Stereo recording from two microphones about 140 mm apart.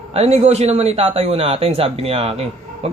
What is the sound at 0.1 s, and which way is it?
Speech, 50° right (ahead or behind).